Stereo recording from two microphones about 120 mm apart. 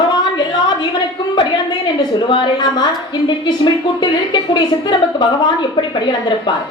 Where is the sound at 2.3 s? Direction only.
40° left (ahead or behind).